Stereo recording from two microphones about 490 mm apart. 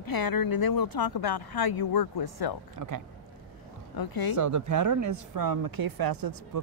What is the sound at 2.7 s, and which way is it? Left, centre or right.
Speech, right.